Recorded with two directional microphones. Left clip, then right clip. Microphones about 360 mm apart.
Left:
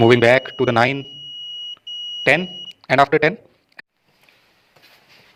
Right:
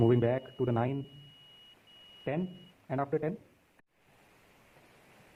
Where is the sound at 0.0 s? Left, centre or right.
Left.